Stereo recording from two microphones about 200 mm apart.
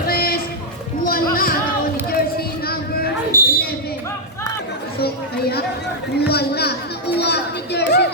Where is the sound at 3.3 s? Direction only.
15° right (ahead or behind).